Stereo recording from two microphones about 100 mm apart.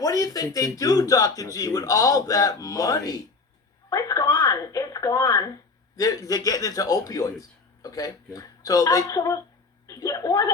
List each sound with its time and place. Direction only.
0.0 s speech: 35° left (ahead or behind)